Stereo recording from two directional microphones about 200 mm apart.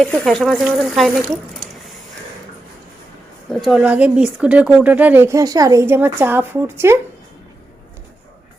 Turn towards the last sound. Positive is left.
turn(degrees=-10)  # may be behind; listen again after turning